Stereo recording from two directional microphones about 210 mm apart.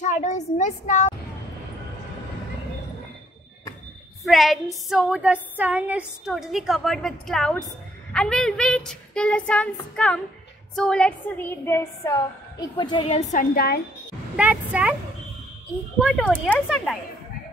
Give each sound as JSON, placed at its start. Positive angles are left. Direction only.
{"t": 0.0, "sound": "a child's voice", "side_deg": 35}
{"t": 4.2, "sound": "a woman's voice", "side_deg": 0}
{"t": 14.3, "sound": "speech", "side_deg": -5}
{"t": 16.0, "sound": "a woman's voice", "side_deg": -5}